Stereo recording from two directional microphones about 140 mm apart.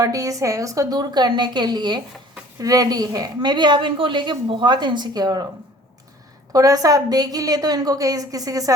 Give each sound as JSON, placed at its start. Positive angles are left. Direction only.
{"t": 0.0, "sound": "a woman's voice", "side_deg": -25}
{"t": 6.5, "sound": "a woman's voice", "side_deg": -25}